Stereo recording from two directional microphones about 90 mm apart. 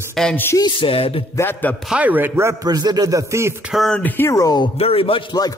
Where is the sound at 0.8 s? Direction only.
90° left.